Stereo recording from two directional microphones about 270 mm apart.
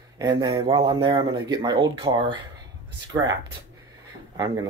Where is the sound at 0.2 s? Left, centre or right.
Centre.